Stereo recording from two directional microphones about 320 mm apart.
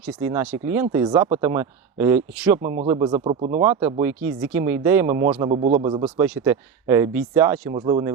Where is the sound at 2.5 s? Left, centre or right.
Right.